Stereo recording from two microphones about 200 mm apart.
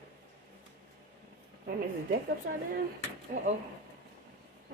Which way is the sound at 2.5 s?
50° right (ahead or behind).